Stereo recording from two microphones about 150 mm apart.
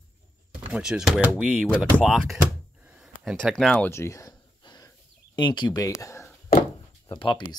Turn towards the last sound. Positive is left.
turn(degrees=30)  # may be behind; listen again after turning